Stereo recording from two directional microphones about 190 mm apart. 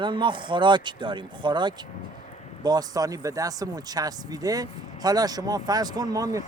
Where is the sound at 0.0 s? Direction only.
25° right (ahead or behind).